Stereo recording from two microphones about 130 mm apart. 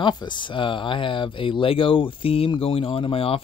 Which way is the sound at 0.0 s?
35° left (ahead or behind).